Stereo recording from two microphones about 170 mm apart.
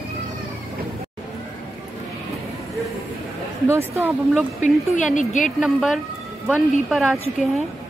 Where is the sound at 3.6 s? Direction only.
15° right (ahead or behind).